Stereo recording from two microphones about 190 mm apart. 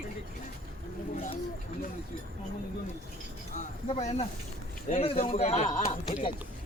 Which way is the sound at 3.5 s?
35° left (ahead or behind).